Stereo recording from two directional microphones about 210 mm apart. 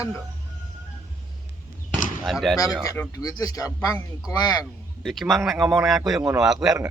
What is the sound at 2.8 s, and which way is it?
A man's voice, 15° left (ahead or behind).